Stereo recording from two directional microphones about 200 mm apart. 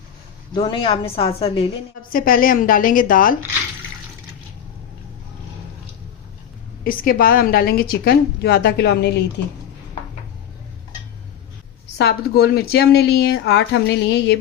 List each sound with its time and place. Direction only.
0.5 s a woman's voice: 25° left (ahead or behind)
2.0 s a woman's voice: 45° left (ahead or behind)
6.8 s a woman's voice: 45° left (ahead or behind)
11.9 s a woman's voice: 50° left (ahead or behind)